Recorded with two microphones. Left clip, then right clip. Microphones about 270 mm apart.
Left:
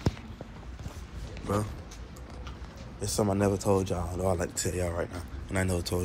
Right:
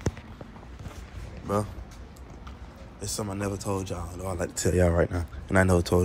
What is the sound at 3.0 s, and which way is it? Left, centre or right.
Speech, centre.